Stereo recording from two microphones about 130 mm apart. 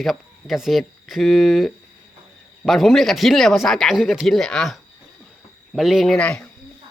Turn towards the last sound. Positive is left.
turn(degrees=10)  # may be behind; listen again after turning